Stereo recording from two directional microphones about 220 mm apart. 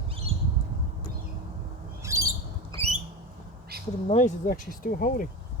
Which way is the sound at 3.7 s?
45° right (ahead or behind).